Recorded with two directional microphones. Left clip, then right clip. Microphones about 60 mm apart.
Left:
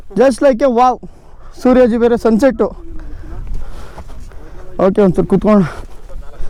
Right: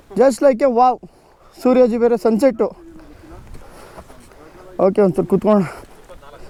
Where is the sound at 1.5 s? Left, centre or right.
Centre.